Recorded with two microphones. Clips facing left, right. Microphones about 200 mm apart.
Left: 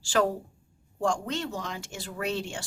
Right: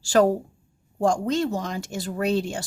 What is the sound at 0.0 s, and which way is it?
Speech, 40° right (ahead or behind).